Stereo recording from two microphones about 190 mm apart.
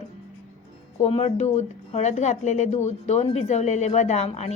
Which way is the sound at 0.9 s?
30° left (ahead or behind).